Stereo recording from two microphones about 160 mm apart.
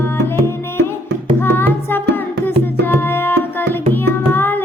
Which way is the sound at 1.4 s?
15° left (ahead or behind).